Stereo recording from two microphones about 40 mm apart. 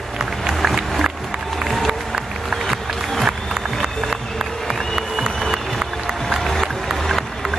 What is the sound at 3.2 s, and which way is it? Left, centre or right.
Music, centre.